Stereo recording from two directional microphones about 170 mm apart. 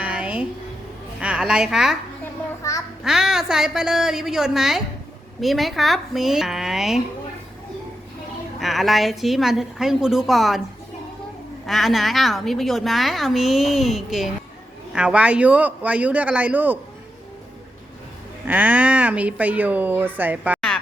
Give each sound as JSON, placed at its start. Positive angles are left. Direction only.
{"t": 0.0, "sound": "a sound", "side_deg": -5}
{"t": 1.2, "sound": "a woman's voice", "side_deg": -5}
{"t": 2.6, "sound": "child singing", "side_deg": 15}
{"t": 3.0, "sound": "a woman's voice", "side_deg": -5}
{"t": 8.5, "sound": "a woman's voice", "side_deg": 0}
{"t": 11.6, "sound": "a woman's voice", "side_deg": 0}
{"t": 18.4, "sound": "speech", "side_deg": -10}